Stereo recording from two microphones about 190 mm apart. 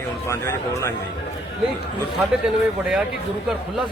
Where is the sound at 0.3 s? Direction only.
15° left (ahead or behind).